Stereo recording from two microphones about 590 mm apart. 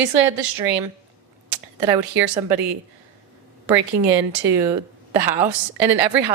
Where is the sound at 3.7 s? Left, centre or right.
Right.